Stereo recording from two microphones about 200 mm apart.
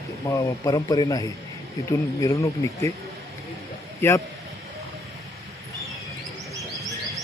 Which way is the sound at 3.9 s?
15° left (ahead or behind).